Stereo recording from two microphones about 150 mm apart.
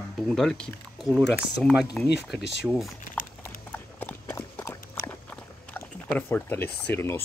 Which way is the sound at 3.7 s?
15° left (ahead or behind).